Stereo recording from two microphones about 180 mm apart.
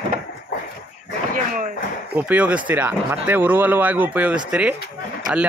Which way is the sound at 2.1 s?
10° right (ahead or behind).